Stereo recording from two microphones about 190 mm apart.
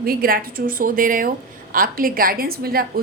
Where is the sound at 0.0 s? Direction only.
50° right (ahead or behind).